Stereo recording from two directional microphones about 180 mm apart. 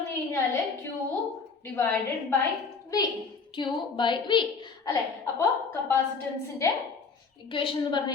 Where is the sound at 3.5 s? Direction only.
25° left (ahead or behind).